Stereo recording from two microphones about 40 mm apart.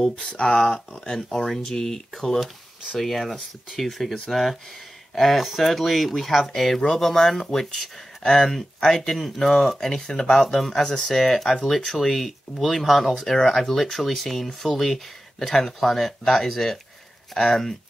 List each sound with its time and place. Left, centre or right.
0.5 s speech: centre
1.4 s speech: centre
10.8 s speech: left
11.1 s speech: centre